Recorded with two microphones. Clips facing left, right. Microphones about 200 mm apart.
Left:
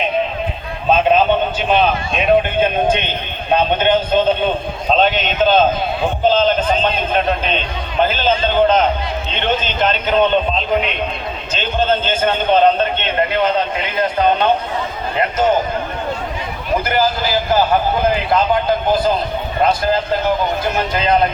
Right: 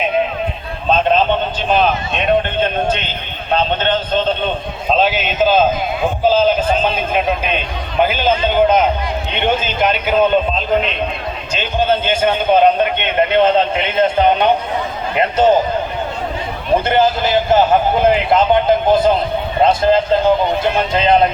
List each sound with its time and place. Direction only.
0.9 s a sound: 10° left (ahead or behind)
1.7 s a man's voice: centre (ahead or behind)
4.9 s a man's voice: 5° right (ahead or behind)
11.5 s a man's voice: 10° right (ahead or behind)
16.8 s a man's voice: 25° right (ahead or behind)